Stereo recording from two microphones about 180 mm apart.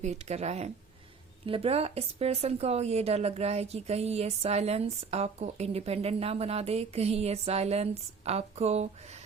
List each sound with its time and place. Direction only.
0.0 s a woman's voice: 40° right (ahead or behind)